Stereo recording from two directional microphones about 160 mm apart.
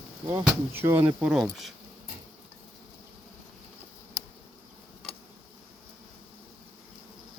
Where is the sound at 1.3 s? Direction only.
Centre (ahead or behind).